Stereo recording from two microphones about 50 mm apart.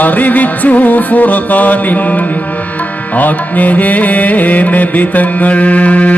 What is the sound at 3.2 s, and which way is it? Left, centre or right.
Music, left.